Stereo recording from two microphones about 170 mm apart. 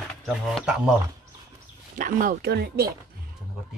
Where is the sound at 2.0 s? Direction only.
55° right (ahead or behind).